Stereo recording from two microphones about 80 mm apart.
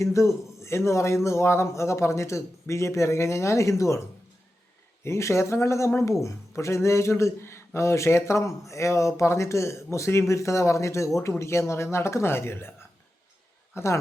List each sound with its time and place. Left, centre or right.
0.0 s speech: left
5.0 s speech: left